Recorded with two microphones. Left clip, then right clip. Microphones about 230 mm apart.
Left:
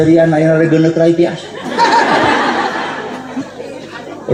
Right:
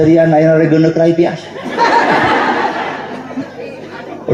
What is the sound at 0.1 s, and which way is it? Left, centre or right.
A man's voice, right.